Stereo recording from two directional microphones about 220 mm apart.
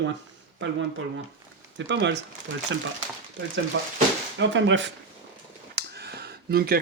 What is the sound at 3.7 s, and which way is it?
A man's voice, 60° right (ahead or behind).